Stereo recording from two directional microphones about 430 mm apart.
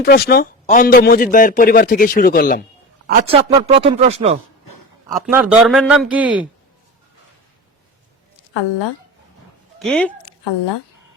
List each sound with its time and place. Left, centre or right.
0.0 s speech: left
3.1 s speech: centre
4.6 s a sound: left
5.0 s a man's voice: centre
9.7 s speech: centre
10.4 s speech: left